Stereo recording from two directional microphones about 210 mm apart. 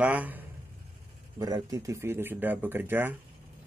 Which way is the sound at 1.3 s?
15° right (ahead or behind).